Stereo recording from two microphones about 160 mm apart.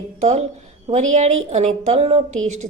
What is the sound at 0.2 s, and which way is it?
Speech, 40° right (ahead or behind).